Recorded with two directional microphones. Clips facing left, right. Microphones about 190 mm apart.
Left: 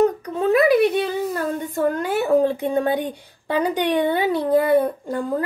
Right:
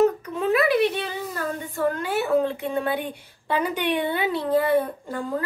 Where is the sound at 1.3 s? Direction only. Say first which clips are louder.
Left 5 dB; 45° left (ahead or behind).